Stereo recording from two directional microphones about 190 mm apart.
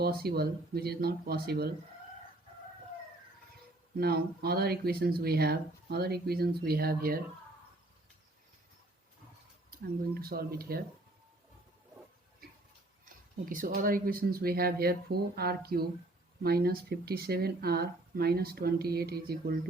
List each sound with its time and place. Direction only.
0.0 s speech: 55° right (ahead or behind)
3.9 s speech: 55° right (ahead or behind)
10.2 s speech: 50° right (ahead or behind)
13.4 s speech: 45° right (ahead or behind)